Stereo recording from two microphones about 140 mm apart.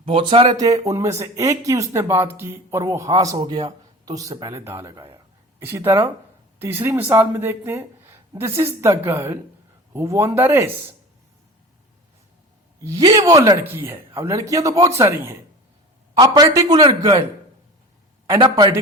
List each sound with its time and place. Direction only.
0.1 s a man's voice: 40° right (ahead or behind); by 10.9 s 15° right (ahead or behind)
12.8 s speech: 25° right (ahead or behind)
16.1 s speech: 30° right (ahead or behind)
18.5 s speech: 25° right (ahead or behind)